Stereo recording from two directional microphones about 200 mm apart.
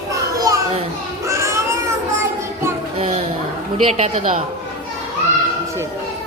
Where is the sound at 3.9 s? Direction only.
35° right (ahead or behind).